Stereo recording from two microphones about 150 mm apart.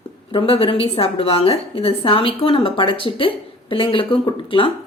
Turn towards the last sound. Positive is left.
turn(degrees=35)  # may be behind; listen again after turning